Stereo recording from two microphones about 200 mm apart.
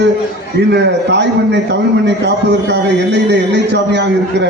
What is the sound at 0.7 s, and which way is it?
A man's voice, 60° right (ahead or behind).